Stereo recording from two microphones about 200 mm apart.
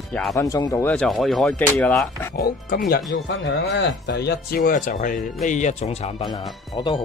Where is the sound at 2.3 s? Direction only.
45° left (ahead or behind).